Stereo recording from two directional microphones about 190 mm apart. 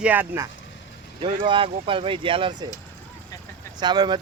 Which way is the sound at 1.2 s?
25° right (ahead or behind).